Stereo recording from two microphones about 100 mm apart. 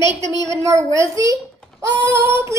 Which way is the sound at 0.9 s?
30° right (ahead or behind).